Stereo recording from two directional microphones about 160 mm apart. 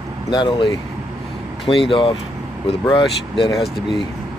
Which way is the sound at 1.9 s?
35° left (ahead or behind).